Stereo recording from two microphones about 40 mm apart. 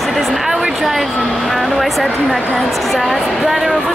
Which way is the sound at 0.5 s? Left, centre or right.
Centre.